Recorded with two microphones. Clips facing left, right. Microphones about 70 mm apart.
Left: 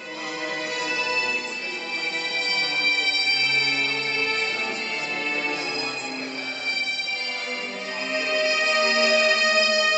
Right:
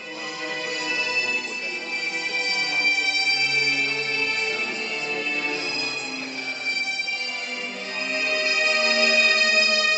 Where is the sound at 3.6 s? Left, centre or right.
Left.